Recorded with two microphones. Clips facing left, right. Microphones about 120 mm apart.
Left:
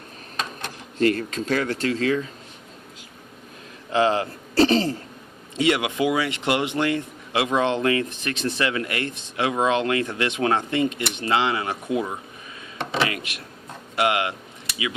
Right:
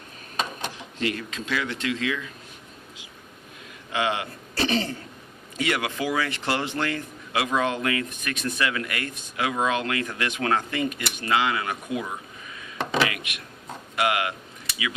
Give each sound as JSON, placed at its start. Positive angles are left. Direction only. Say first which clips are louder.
{"t": 0.9, "sound": "speech", "louder": "left 9 dB", "side_deg": 40}
{"t": 3.9, "sound": "a man's voice", "louder": "left 6 dB", "side_deg": 35}
{"t": 13.0, "sound": "a sound", "louder": "left 1 dB", "side_deg": 30}
{"t": 13.9, "sound": "speech", "louder": "left 2 dB", "side_deg": 25}